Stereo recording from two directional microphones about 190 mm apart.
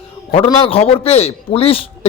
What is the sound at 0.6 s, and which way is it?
Speech, 30° left (ahead or behind).